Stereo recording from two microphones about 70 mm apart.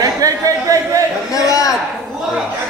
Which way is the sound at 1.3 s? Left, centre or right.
Left.